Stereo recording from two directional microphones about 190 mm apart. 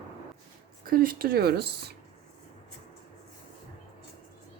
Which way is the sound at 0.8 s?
50° right (ahead or behind).